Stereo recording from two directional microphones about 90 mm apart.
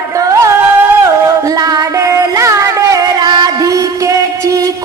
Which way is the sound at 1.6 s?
40° right (ahead or behind).